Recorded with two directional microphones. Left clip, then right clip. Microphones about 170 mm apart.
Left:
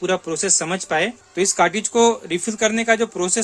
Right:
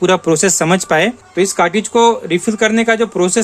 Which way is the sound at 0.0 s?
25° right (ahead or behind).